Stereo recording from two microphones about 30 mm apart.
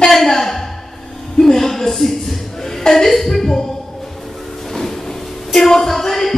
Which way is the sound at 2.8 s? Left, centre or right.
Centre.